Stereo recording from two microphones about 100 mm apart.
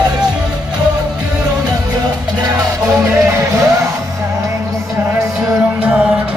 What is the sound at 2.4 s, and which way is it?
Music, 35° right (ahead or behind).